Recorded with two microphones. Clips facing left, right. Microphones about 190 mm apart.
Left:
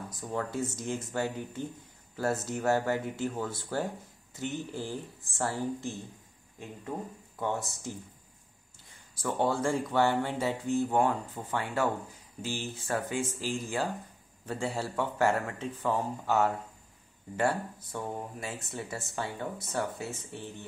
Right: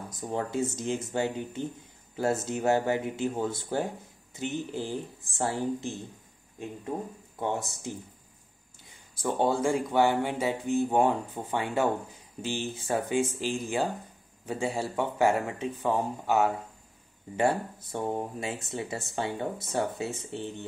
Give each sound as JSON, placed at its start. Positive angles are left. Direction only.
{"t": 0.2, "sound": "speech", "side_deg": -20}
{"t": 7.3, "sound": "speech", "side_deg": -20}
{"t": 9.2, "sound": "speech", "side_deg": -20}